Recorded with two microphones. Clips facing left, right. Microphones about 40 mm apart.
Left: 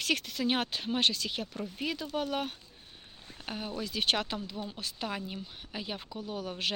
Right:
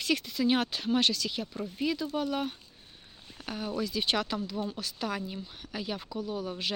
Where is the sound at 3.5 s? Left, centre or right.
Left.